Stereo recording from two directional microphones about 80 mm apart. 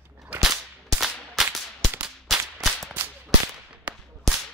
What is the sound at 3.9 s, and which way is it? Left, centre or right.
Whip, centre.